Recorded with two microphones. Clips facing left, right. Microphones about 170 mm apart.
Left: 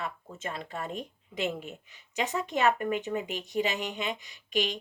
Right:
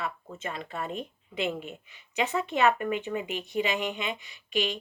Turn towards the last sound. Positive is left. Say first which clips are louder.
# right 1 dB
turn(degrees=45)  # may be behind; listen again after turning